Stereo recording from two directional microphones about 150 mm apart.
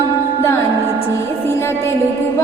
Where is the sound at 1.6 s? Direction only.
15° left (ahead or behind).